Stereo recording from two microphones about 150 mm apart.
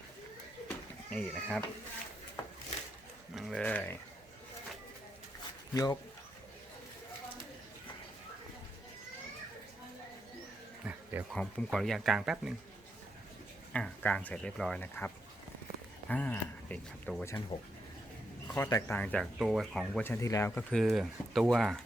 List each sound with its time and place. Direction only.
1.1 s speech: 5° left (ahead or behind)
3.3 s speech: centre (ahead or behind)
3.6 s speech: 10° left (ahead or behind)
5.7 s speech: 25° left (ahead or behind)
10.8 s insect: 5° right (ahead or behind)
11.3 s speech: 5° left (ahead or behind)
13.7 s speech: 10° left (ahead or behind)
17.5 s speech: 40° left (ahead or behind)
18.5 s speech: 15° left (ahead or behind); by 20.0 s centre (ahead or behind)
20.0 s speech: 15° left (ahead or behind)
20.6 s speech: 5° left (ahead or behind)